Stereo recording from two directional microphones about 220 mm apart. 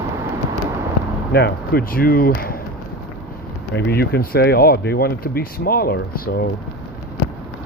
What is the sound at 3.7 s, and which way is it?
Speech, 45° left (ahead or behind).